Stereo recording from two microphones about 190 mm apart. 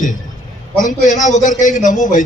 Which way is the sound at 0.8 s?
40° left (ahead or behind).